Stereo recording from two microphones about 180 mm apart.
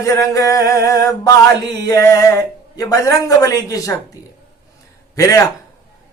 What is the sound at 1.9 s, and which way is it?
Speech, 20° left (ahead or behind).